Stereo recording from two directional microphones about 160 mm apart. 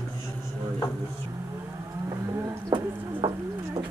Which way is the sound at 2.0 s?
15° right (ahead or behind).